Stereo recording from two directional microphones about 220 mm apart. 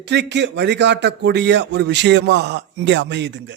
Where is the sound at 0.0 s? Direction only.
50° right (ahead or behind).